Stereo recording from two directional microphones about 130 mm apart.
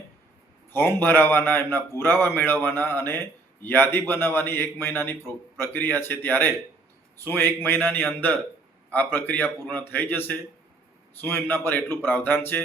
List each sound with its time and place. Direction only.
0.7 s speech: 15° left (ahead or behind)